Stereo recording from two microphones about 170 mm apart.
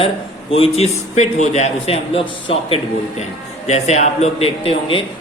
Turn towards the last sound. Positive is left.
turn(degrees=35)  # may be behind; listen again after turning